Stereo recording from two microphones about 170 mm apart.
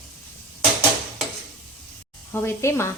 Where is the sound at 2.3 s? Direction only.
15° left (ahead or behind).